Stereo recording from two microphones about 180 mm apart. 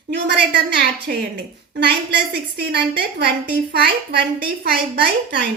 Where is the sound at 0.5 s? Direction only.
65° right (ahead or behind).